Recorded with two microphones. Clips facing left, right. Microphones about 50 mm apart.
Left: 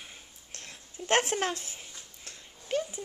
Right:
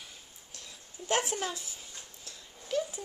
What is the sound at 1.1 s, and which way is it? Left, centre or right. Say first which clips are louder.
Speech: left 4 dB; left.